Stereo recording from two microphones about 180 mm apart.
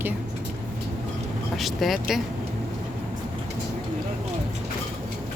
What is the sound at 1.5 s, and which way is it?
Speech, centre (ahead or behind).